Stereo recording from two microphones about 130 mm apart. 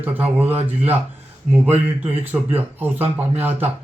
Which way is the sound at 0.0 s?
15° right (ahead or behind).